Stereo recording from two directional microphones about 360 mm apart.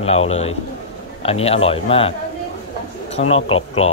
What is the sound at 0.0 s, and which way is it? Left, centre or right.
Speech, centre.